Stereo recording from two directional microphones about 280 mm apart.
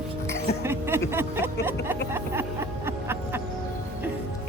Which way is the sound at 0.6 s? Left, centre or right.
Centre.